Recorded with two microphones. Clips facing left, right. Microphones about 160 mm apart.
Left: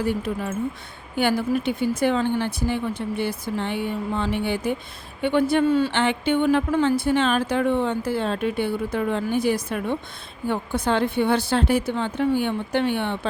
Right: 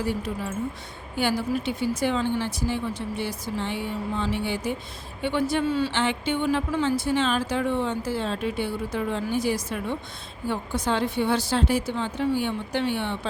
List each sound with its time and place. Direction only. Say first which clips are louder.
0.0 s speech: left 3 dB; 55° left (ahead or behind)